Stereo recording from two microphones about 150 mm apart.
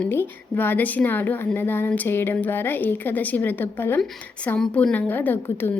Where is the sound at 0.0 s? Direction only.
15° left (ahead or behind).